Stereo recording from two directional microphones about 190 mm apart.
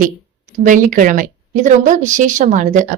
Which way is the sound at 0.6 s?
45° right (ahead or behind).